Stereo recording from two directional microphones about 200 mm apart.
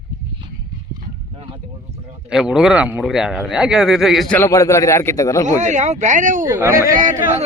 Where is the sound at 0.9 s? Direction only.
25° right (ahead or behind).